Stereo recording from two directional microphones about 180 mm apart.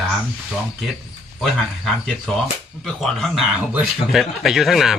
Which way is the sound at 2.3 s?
Centre (ahead or behind).